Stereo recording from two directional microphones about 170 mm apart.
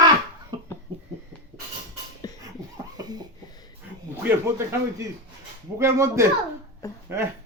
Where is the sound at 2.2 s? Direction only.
25° left (ahead or behind).